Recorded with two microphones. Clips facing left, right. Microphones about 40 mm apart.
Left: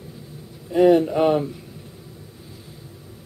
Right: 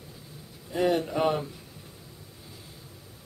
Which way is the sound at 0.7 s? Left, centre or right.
Centre.